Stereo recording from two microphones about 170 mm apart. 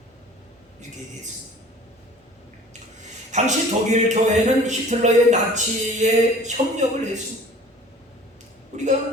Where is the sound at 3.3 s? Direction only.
45° right (ahead or behind).